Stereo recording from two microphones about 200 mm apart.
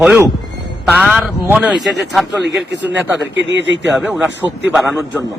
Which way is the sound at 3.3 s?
65° right (ahead or behind).